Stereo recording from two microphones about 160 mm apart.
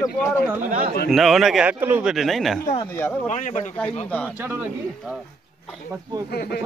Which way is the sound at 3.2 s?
50° left (ahead or behind).